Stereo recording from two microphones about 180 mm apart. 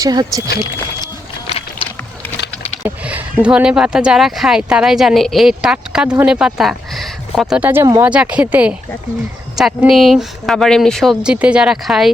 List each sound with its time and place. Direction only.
0.0 s speech: 20° right (ahead or behind)
1.5 s a sound: 35° left (ahead or behind)
2.8 s speech: 10° right (ahead or behind)